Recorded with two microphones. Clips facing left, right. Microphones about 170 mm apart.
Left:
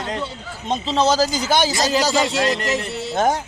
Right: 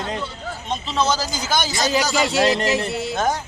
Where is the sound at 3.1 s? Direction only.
25° left (ahead or behind).